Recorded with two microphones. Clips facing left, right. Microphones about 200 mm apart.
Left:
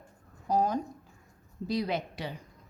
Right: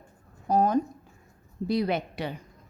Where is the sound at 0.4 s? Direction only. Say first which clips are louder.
Right 4 dB; 60° right (ahead or behind).